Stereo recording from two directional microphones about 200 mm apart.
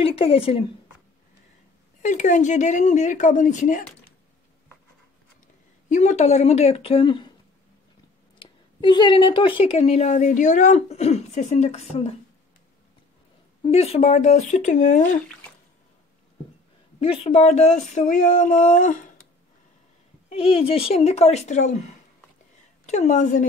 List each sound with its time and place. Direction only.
0.0 s a woman's voice: 30° left (ahead or behind)
2.0 s a woman's voice: 40° left (ahead or behind)
5.9 s a woman's voice: 35° left (ahead or behind)
8.4 s a woman's voice: 20° left (ahead or behind)
13.6 s a woman's voice: 30° left (ahead or behind)
17.0 s a woman's voice: 30° left (ahead or behind)
20.2 s a woman's voice: 30° left (ahead or behind)
22.8 s a woman's voice: 35° left (ahead or behind)